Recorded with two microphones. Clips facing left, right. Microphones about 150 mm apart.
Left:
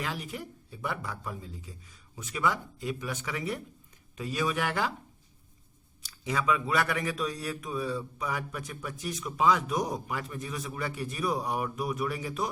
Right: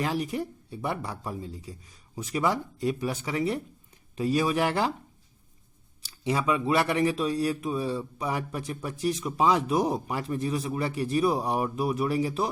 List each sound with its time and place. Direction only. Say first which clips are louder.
0.0 s speech: right 8 dB; 35° right (ahead or behind)
6.1 s speech: right 3 dB; 30° right (ahead or behind)